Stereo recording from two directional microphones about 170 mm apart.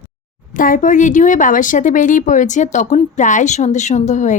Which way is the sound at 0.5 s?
50° left (ahead or behind).